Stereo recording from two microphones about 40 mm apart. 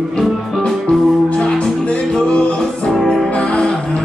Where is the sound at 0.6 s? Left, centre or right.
Left.